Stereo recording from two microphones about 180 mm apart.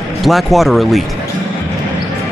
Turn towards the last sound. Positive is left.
turn(degrees=0)  # may be behind; listen again after turning